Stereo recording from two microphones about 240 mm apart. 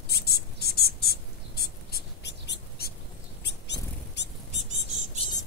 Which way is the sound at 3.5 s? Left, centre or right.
Left.